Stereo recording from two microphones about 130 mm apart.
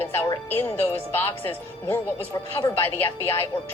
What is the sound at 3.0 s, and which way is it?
Speech, 15° left (ahead or behind).